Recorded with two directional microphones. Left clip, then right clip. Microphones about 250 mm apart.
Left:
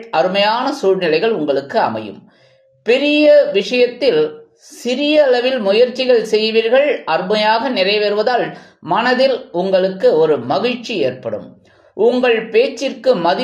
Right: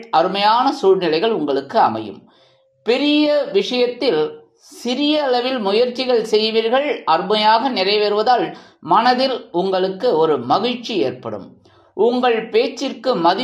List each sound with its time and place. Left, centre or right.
0.1 s speech: centre